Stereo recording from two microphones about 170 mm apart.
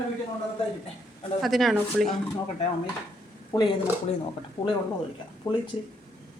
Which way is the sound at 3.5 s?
20° left (ahead or behind).